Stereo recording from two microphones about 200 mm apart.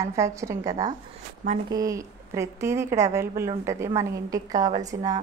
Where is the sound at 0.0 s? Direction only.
15° right (ahead or behind).